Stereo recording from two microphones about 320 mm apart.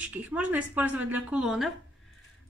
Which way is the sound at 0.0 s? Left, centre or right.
Centre.